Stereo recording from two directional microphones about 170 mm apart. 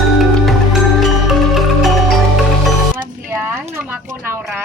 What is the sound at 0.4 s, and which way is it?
Music, centre (ahead or behind).